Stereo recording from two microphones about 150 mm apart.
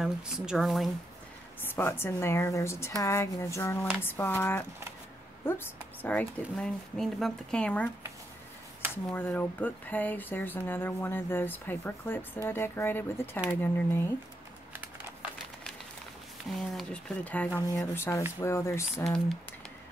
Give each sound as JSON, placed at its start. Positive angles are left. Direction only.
{"t": 0.0, "sound": "speech", "side_deg": -5}
{"t": 1.8, "sound": "speech", "side_deg": 15}
{"t": 8.9, "sound": "speech", "side_deg": 15}
{"t": 16.5, "sound": "speech", "side_deg": 5}